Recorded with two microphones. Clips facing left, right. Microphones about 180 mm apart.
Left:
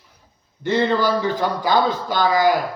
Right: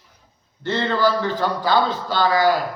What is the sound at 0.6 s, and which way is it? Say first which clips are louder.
Speech: left 2 dB; 15° left (ahead or behind).